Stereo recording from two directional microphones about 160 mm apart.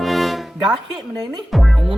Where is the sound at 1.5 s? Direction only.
Centre (ahead or behind).